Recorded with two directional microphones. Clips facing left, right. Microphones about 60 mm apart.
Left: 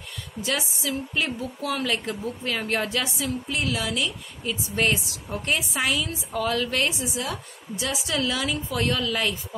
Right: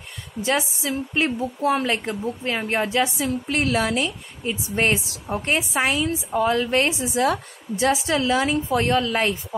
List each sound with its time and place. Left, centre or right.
0.4 s a woman's voice: right
3.4 s a woman's voice: right
7.2 s a woman's voice: right